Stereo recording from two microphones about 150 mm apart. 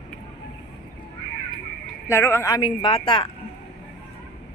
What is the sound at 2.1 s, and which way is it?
Speech, 20° left (ahead or behind).